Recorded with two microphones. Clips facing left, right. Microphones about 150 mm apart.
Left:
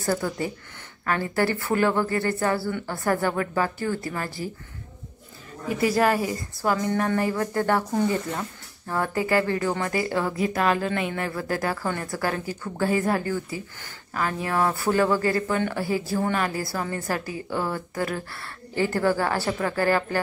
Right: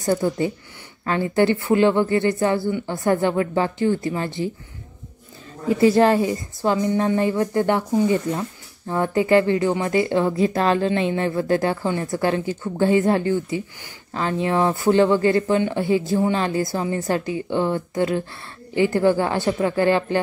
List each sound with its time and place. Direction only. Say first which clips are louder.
0.0 s speech: right 5 dB; 20° right (ahead or behind)
5.7 s speech: right 6 dB; 25° right (ahead or behind)
8.8 s speech: right 5 dB; 20° right (ahead or behind)